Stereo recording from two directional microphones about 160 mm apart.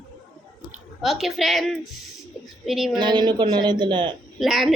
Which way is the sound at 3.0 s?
30° right (ahead or behind).